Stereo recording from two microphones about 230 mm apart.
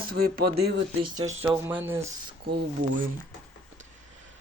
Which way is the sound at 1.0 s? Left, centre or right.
Centre.